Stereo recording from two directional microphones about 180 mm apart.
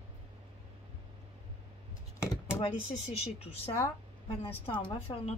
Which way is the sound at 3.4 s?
35° left (ahead or behind).